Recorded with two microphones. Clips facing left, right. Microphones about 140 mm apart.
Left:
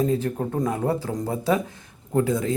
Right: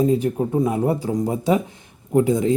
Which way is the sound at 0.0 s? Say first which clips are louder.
Right 4 dB; 15° right (ahead or behind).